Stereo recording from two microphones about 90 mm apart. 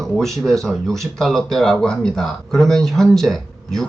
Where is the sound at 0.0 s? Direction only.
5° left (ahead or behind).